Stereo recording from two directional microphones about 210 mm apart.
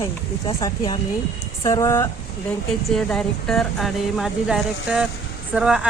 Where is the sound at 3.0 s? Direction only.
Centre (ahead or behind).